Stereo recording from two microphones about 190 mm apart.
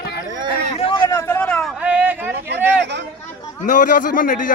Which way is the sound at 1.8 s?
10° right (ahead or behind).